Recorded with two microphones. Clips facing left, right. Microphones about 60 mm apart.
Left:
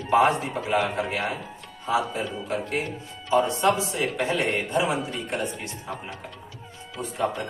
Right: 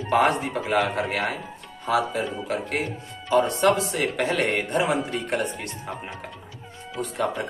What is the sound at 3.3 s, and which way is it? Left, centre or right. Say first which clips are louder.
A man's voice: right 1 dB; right.